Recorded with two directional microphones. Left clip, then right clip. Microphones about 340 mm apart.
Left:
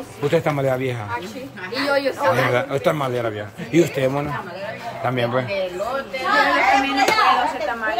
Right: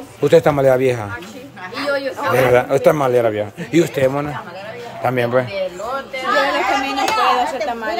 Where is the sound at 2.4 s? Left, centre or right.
Centre.